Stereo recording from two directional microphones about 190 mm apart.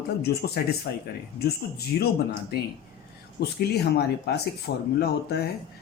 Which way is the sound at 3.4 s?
60° left (ahead or behind).